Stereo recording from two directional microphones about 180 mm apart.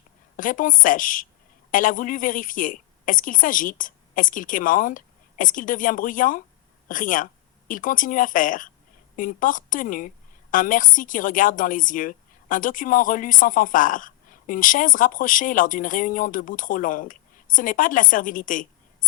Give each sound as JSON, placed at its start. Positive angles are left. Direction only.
{"t": 0.3, "sound": "a woman's voice", "side_deg": 50}